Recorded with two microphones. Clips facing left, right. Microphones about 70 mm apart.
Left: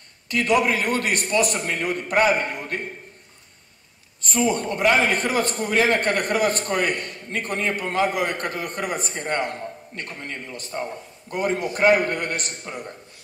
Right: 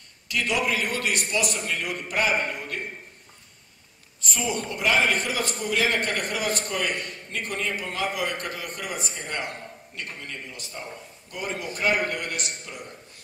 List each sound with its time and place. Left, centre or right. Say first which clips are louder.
0.3 s a man's voice: left 6 dB; left
4.2 s a man's voice: left 7 dB; left